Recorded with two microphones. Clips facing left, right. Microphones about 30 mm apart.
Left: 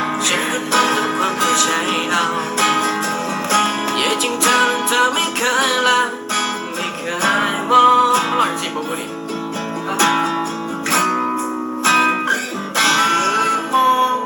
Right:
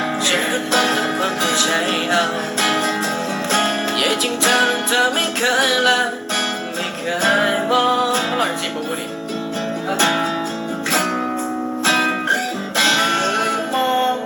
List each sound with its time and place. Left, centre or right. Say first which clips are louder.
0.3 s music: right 2 dB; centre
10.0 s music: left 2 dB; centre
11.9 s music: left 3 dB; centre